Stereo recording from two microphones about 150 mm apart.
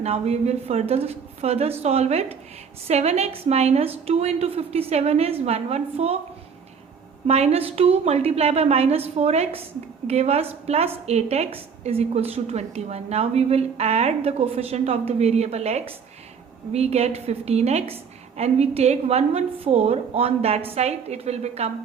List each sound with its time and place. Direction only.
0.0 s a woman's voice: 45° right (ahead or behind)
7.3 s a woman's voice: 45° right (ahead or behind)